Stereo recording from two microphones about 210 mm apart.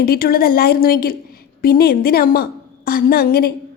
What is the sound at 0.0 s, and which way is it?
A woman's voice, 45° left (ahead or behind).